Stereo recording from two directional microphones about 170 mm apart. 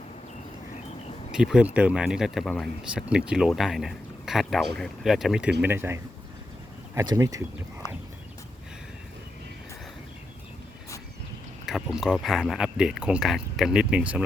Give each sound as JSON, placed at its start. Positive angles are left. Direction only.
{"t": 1.3, "sound": "speech", "side_deg": -5}
{"t": 11.6, "sound": "speech", "side_deg": -5}